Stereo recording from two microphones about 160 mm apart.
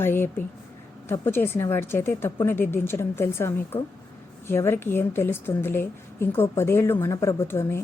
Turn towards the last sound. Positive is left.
turn(degrees=15)  # may be behind; listen again after turning